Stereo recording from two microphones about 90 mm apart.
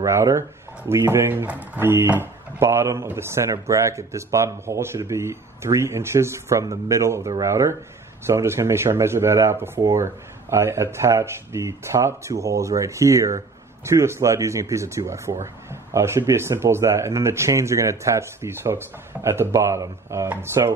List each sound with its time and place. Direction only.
0.0 s a man's voice: 35° right (ahead or behind)